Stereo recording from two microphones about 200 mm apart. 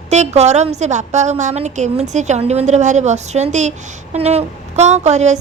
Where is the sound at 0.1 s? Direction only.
35° right (ahead or behind).